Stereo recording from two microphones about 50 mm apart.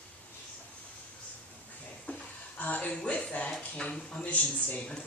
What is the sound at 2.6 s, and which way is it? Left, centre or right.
Speech, left.